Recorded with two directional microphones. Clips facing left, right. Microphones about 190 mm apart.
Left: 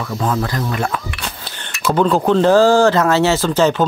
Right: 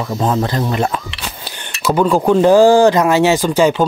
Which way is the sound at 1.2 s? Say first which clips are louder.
Right 1 dB; 10° right (ahead or behind).